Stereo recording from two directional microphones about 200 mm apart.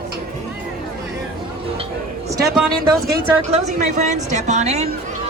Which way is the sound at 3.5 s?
35° right (ahead or behind).